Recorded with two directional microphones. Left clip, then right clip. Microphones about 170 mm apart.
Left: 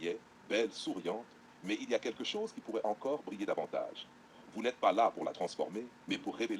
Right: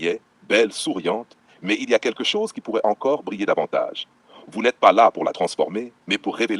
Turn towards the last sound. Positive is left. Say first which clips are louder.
# right 15 dB
turn(degrees=-50)  # may be behind; listen again after turning